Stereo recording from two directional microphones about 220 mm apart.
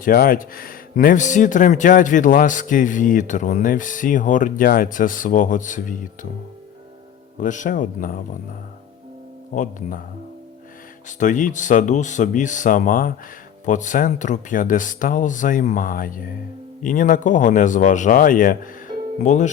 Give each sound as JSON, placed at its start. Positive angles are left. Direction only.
{"t": 0.0, "sound": "speech", "side_deg": 40}
{"t": 7.3, "sound": "speech", "side_deg": 35}
{"t": 9.5, "sound": "speech", "side_deg": 35}
{"t": 11.2, "sound": "speech", "side_deg": 35}